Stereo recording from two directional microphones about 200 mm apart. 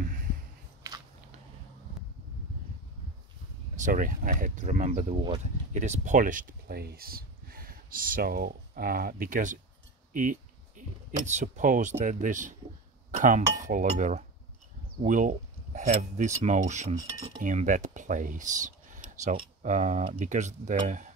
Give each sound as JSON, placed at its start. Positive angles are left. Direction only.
{"t": 0.0, "sound": "a sound", "side_deg": -45}
{"t": 3.8, "sound": "cutlery", "side_deg": -45}
{"t": 5.4, "sound": "speech", "side_deg": -35}
{"t": 11.1, "sound": "cutlery", "side_deg": -40}
{"t": 17.4, "sound": "speech", "side_deg": -40}
{"t": 20.2, "sound": "cutlery", "side_deg": -35}